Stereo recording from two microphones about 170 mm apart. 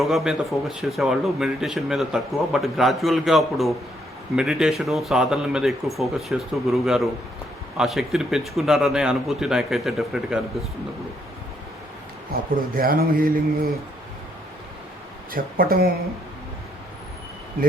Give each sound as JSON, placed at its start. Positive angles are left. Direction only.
{"t": 0.0, "sound": "speech", "side_deg": 0}
{"t": 12.3, "sound": "speech", "side_deg": -60}
{"t": 15.3, "sound": "speech", "side_deg": -60}